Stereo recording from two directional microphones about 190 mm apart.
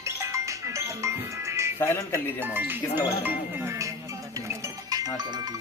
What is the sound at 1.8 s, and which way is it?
Speech, 10° left (ahead or behind).